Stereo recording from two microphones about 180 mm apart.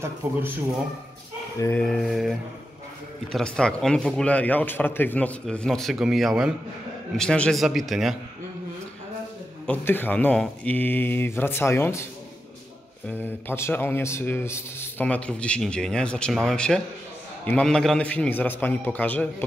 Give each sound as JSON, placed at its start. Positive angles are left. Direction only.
{"t": 0.2, "sound": "speech", "side_deg": -15}
{"t": 1.6, "sound": "speech", "side_deg": 10}
{"t": 9.7, "sound": "a man's voice", "side_deg": 10}
{"t": 13.2, "sound": "a man's voice", "side_deg": 10}